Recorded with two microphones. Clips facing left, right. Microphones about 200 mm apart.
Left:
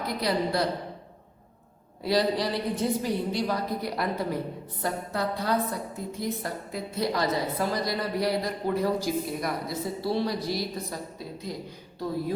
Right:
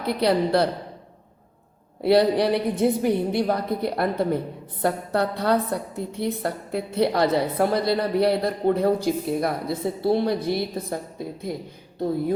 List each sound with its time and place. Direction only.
0.2 s a woman's voice: 60° right (ahead or behind)
2.0 s a woman's voice: 60° right (ahead or behind)